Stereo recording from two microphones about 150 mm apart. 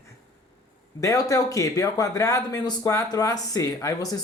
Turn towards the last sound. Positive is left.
turn(degrees=20)  # may be behind; listen again after turning